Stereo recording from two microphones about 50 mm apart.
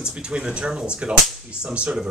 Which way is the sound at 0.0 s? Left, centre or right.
Centre.